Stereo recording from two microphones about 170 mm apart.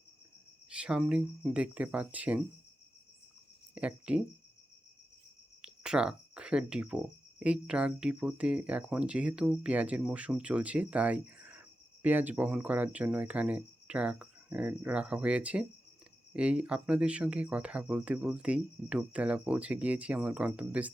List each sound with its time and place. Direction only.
0.7 s speech: 5° right (ahead or behind)
3.8 s speech: 5° right (ahead or behind)
5.6 s speech: 5° right (ahead or behind)